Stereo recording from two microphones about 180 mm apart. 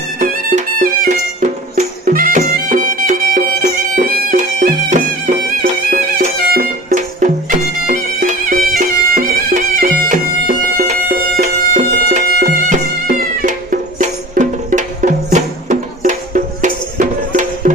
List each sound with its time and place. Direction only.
0.2 s music: 45° right (ahead or behind)